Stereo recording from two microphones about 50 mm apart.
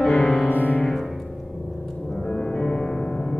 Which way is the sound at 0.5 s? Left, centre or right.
Left.